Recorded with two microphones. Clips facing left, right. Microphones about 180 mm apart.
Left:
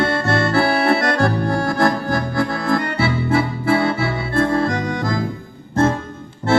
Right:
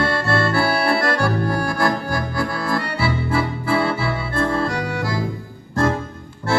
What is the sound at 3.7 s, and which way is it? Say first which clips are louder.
Music: left 2 dB; 25° left (ahead or behind).